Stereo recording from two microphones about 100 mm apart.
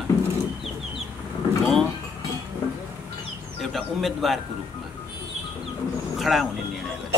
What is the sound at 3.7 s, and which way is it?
Speech, centre (ahead or behind).